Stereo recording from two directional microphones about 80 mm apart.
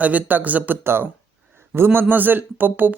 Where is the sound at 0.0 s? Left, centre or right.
Centre.